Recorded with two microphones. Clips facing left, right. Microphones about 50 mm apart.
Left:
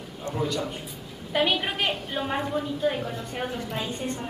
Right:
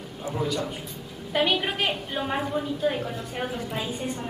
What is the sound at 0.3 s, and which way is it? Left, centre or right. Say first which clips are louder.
Speech: even; centre.